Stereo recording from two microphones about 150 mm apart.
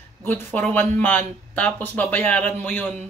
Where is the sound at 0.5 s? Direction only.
10° left (ahead or behind).